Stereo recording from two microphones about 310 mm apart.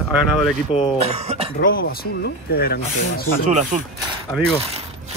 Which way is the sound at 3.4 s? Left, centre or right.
Right.